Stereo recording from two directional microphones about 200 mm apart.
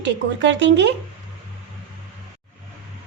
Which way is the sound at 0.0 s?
60° right (ahead or behind).